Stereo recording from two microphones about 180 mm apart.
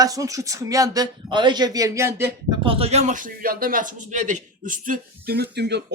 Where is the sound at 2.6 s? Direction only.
30° right (ahead or behind).